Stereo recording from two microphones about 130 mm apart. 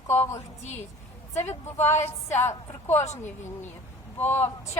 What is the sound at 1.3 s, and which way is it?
A woman's voice, 15° left (ahead or behind).